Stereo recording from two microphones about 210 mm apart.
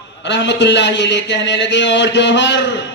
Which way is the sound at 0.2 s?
60° left (ahead or behind).